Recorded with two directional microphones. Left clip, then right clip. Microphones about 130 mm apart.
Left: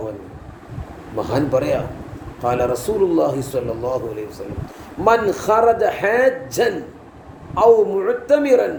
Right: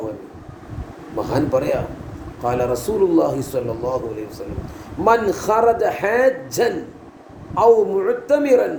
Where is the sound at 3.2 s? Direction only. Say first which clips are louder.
Even; 5° left (ahead or behind).